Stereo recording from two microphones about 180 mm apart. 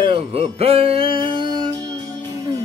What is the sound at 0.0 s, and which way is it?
Music, 30° right (ahead or behind).